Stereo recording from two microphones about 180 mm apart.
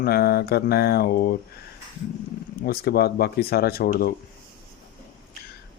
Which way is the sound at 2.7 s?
60° left (ahead or behind).